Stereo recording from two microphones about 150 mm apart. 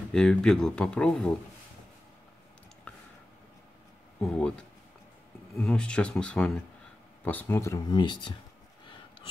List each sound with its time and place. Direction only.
0.1 s speech: 5° left (ahead or behind)
4.2 s speech: 5° left (ahead or behind); by 8.2 s 30° left (ahead or behind)